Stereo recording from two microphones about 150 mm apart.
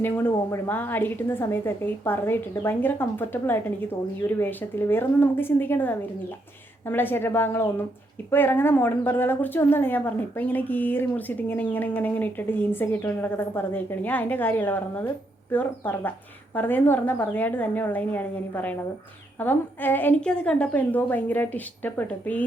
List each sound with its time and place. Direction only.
0.0 s a woman's voice: 15° left (ahead or behind)